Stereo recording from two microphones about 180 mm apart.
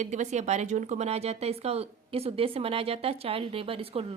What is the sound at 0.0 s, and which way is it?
A woman's voice, 40° right (ahead or behind).